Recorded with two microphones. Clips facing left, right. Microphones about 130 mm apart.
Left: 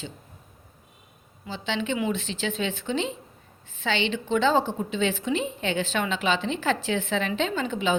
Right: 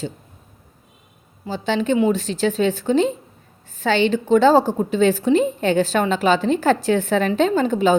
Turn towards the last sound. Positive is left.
turn(degrees=-40)  # may be behind; listen again after turning